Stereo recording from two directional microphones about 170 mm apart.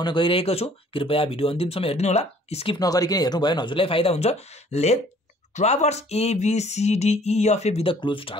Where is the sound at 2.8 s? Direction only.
20° left (ahead or behind); by 5.0 s 40° left (ahead or behind).